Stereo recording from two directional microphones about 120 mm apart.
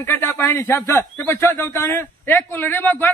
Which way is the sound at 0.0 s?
20° left (ahead or behind).